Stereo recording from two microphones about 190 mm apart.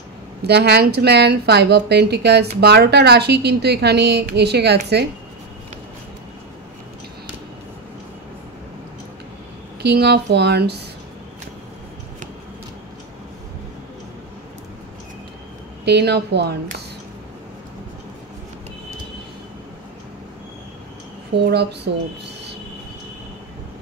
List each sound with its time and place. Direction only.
0.4 s a woman's voice: 60° right (ahead or behind)
9.8 s a woman's voice: 60° right (ahead or behind)
15.8 s a woman's voice: 60° right (ahead or behind)
21.4 s a woman's voice: 60° right (ahead or behind)